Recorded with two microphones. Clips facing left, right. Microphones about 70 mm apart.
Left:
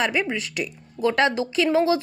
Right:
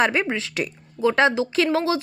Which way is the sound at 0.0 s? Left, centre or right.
Right.